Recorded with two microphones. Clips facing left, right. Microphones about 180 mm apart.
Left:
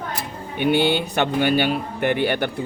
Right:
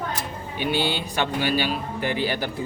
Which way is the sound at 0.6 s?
60° left (ahead or behind).